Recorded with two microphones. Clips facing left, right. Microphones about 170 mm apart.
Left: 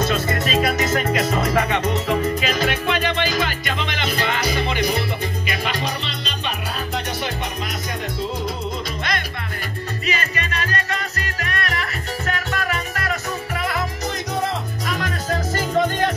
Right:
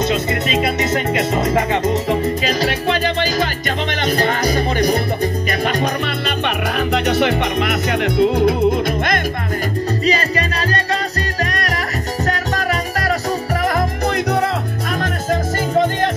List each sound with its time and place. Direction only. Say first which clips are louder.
0.0 s music: right 3 dB; 20° right (ahead or behind); by 9.2 s 55° right (ahead or behind)
10.0 s music: right 6 dB; 35° right (ahead or behind)
13.7 s music: right 7 dB; 50° right (ahead or behind)